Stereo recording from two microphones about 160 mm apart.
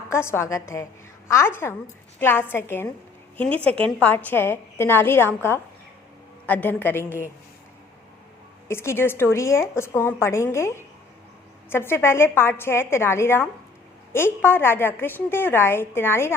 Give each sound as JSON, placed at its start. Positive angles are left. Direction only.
{"t": 0.1, "sound": "a woman's voice", "side_deg": 15}
{"t": 8.6, "sound": "a woman's voice", "side_deg": 15}